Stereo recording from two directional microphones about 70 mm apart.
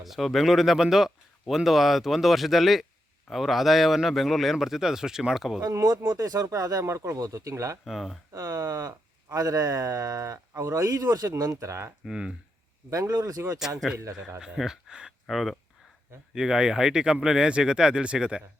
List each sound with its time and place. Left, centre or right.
0.0 s speech: centre
5.6 s speech: right
7.9 s speech: centre
8.3 s speech: right
12.0 s speech: centre
12.9 s speech: right
13.7 s speech: right
14.3 s speech: centre